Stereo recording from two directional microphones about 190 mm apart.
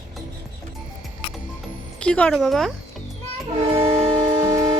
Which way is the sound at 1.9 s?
5° left (ahead or behind).